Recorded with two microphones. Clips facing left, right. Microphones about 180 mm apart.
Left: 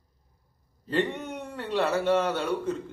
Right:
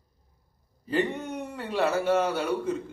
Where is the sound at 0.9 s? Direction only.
10° right (ahead or behind).